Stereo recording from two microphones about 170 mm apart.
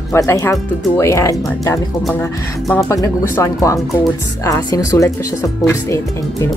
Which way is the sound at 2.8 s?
20° left (ahead or behind).